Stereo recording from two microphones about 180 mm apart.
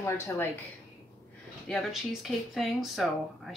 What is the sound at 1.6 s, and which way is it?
Speech, centre (ahead or behind).